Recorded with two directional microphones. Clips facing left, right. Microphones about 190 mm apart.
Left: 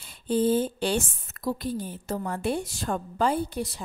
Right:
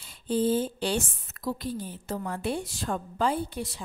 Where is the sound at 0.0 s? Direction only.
55° left (ahead or behind).